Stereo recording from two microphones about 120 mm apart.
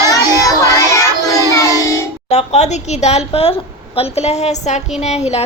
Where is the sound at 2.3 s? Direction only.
65° left (ahead or behind).